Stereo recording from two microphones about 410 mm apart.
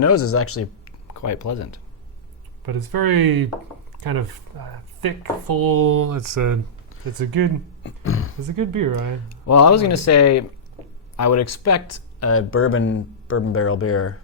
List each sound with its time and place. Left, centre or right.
0.0 s speech: left
2.6 s speech: right
4.5 s speech: right
7.9 s speech: left
8.4 s speech: right
9.3 s speech: left